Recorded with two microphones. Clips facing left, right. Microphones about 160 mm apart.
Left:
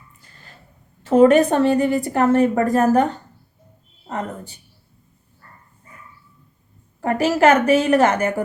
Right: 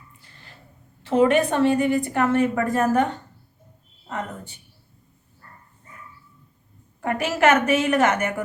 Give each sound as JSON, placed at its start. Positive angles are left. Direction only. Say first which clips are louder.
{"t": 1.0, "sound": "a woman's voice", "louder": "left 6 dB", "side_deg": 40}
{"t": 7.0, "sound": "a woman's voice", "louder": "left 4 dB", "side_deg": 35}